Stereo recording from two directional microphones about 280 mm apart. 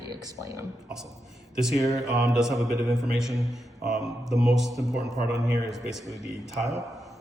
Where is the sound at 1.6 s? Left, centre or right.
Centre.